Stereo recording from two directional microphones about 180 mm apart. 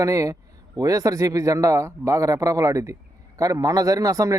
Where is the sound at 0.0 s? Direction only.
20° right (ahead or behind).